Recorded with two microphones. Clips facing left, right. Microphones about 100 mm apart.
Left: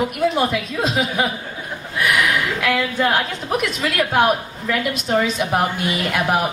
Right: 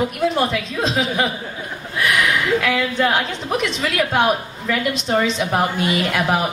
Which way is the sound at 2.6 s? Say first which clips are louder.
Even; centre (ahead or behind).